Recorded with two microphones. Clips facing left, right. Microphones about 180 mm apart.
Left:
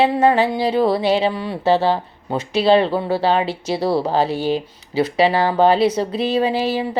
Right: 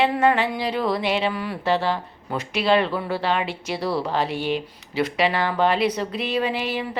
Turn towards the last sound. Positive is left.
turn(degrees=30)  # may be behind; listen again after turning